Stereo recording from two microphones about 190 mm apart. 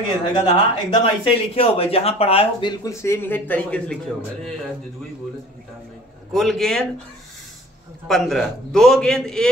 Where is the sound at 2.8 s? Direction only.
15° left (ahead or behind).